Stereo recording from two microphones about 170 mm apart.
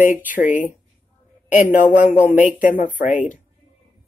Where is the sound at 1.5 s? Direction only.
50° left (ahead or behind).